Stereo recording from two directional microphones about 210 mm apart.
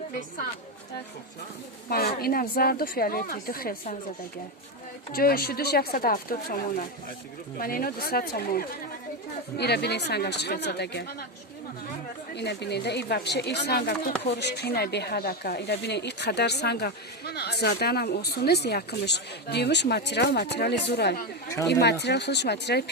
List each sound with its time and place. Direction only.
1.9 s speech: 45° left (ahead or behind)
5.1 s speech: 45° left (ahead or behind)
12.3 s speech: 55° left (ahead or behind)